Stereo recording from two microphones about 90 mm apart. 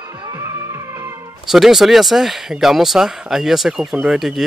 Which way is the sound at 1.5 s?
5° right (ahead or behind).